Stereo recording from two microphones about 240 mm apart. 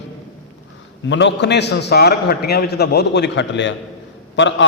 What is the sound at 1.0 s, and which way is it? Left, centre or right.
A man's voice, left.